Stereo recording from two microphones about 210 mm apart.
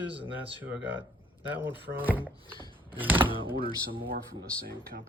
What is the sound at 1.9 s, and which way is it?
Speech, 10° right (ahead or behind).